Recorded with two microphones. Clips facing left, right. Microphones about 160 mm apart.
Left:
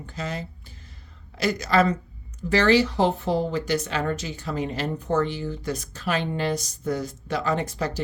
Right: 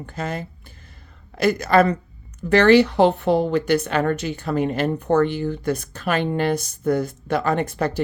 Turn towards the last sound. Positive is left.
turn(degrees=-60)  # may be behind; listen again after turning